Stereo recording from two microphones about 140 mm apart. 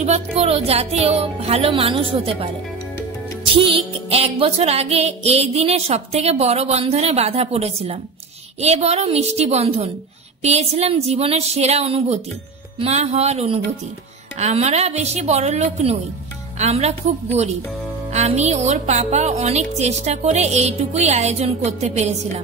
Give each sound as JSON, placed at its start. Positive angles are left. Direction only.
{"t": 0.0, "sound": "music", "side_deg": -50}
{"t": 3.5, "sound": "music", "side_deg": -40}